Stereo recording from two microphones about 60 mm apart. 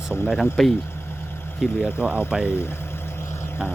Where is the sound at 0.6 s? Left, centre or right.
Centre.